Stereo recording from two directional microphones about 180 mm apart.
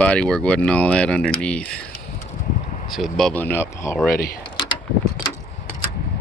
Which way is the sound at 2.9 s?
Centre (ahead or behind).